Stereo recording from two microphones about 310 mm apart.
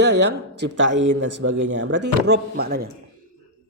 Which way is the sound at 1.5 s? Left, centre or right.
Right.